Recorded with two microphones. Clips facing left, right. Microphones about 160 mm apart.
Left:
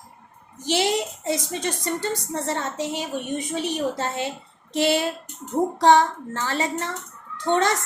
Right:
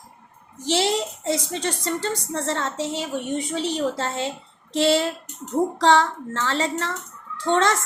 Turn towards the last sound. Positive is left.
turn(degrees=15)  # may be behind; listen again after turning